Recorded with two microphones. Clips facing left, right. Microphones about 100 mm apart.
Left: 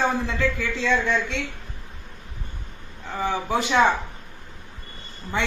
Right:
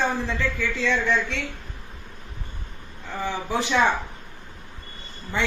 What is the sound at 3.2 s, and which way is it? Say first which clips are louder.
Speech: left 2 dB; 15° left (ahead or behind).